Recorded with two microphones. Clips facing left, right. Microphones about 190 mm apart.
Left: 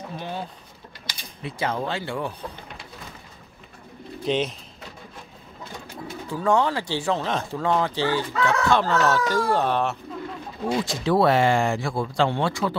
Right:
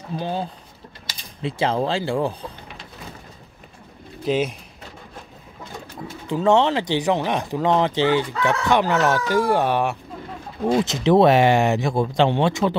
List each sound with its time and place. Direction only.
0.2 s speech: 30° right (ahead or behind)
4.2 s speech: 5° right (ahead or behind)
6.2 s speech: 25° right (ahead or behind)
10.6 s speech: 25° right (ahead or behind)